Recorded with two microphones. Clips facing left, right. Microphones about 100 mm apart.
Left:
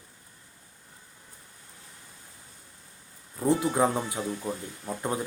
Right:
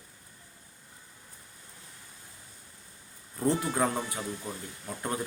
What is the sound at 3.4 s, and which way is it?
Speech, 15° left (ahead or behind).